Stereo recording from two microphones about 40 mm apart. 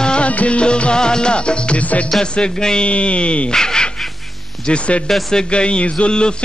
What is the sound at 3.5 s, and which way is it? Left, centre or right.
Speech, centre.